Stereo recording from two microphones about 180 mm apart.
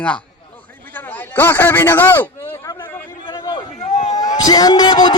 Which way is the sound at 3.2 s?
20° left (ahead or behind).